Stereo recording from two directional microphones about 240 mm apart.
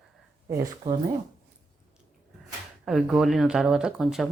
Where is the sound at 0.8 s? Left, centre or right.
Centre.